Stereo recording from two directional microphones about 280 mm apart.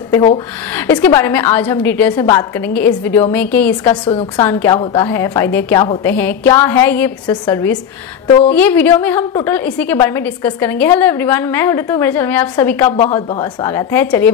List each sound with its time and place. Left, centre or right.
0.7 s a woman's voice: centre
4.5 s a woman's voice: centre
12.8 s a woman's voice: left